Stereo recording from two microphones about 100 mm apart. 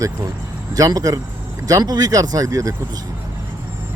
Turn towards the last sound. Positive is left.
turn(degrees=-35)  # may be behind; listen again after turning